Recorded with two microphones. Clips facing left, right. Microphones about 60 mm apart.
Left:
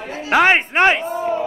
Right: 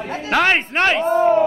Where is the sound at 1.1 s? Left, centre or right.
Right.